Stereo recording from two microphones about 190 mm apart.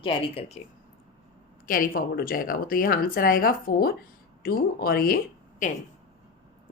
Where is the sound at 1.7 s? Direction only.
50° left (ahead or behind).